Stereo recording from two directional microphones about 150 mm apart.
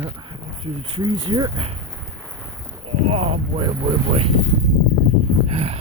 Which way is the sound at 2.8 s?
40° right (ahead or behind).